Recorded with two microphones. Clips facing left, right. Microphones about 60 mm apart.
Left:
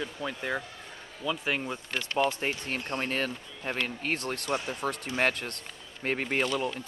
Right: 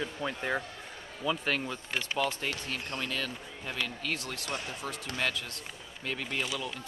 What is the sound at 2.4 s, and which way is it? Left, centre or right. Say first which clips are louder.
Speech: left 3 dB; left.